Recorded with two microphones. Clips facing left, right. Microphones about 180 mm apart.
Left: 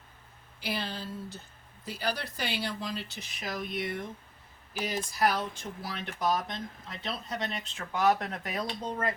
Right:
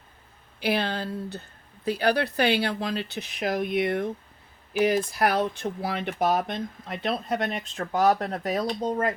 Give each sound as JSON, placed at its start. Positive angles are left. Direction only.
{"t": 0.6, "sound": "speech", "side_deg": -65}